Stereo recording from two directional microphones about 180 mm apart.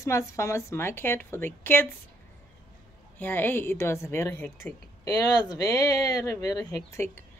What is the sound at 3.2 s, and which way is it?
Speech, 10° left (ahead or behind).